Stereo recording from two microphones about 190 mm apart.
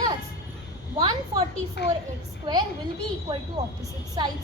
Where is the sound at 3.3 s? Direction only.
25° right (ahead or behind).